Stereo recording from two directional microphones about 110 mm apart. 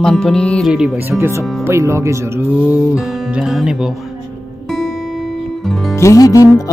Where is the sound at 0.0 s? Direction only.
5° left (ahead or behind).